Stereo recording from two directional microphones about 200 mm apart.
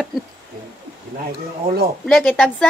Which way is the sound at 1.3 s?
50° right (ahead or behind).